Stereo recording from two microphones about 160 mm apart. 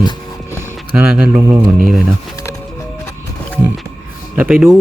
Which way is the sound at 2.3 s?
20° left (ahead or behind).